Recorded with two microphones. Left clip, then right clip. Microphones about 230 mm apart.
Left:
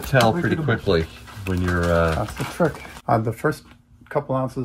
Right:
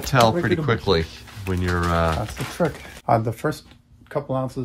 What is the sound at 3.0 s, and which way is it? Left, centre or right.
Speech, centre.